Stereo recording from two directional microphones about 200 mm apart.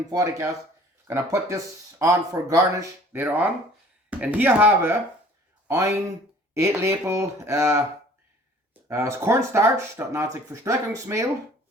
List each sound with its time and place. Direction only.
0.1 s speech: 15° right (ahead or behind)